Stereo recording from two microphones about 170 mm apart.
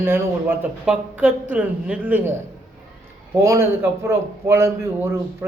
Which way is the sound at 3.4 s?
15° right (ahead or behind).